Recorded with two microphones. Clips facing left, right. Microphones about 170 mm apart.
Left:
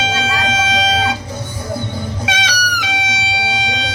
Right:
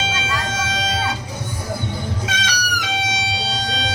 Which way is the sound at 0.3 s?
75° left (ahead or behind).